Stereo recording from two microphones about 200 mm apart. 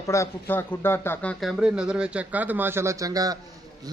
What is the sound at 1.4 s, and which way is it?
A man's voice, centre (ahead or behind).